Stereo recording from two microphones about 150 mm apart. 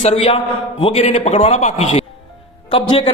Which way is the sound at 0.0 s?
45° left (ahead or behind).